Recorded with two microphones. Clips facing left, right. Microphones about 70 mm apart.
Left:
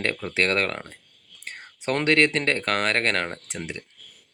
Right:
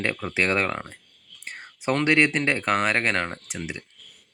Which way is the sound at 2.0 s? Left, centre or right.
Centre.